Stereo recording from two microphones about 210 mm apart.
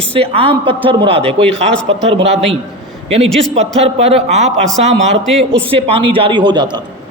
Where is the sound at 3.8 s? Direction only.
30° right (ahead or behind).